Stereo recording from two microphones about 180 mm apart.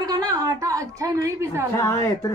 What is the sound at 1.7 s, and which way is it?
Speech, 15° left (ahead or behind).